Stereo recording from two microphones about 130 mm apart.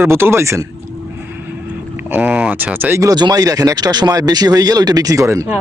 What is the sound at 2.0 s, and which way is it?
Speech, 10° right (ahead or behind).